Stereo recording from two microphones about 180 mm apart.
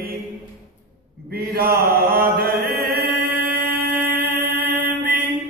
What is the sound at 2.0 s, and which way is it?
Chant, 60° right (ahead or behind).